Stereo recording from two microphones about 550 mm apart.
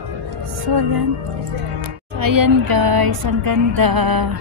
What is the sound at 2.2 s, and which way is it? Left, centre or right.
Music, right.